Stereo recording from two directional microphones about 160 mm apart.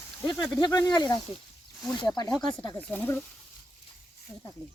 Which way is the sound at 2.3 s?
5° left (ahead or behind).